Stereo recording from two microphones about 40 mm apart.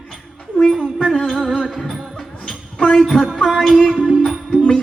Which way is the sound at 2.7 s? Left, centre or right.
Centre.